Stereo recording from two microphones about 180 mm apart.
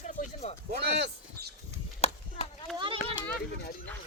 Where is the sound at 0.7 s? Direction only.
70° right (ahead or behind).